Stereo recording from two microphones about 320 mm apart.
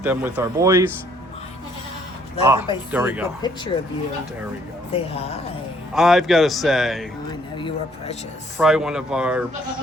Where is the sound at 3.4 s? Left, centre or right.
Centre.